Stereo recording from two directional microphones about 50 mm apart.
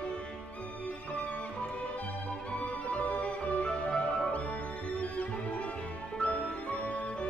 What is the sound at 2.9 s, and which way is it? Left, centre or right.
Music, left.